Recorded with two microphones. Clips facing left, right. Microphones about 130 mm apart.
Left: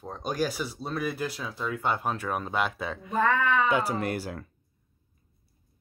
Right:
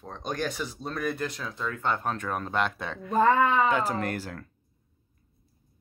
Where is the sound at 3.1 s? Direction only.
35° right (ahead or behind).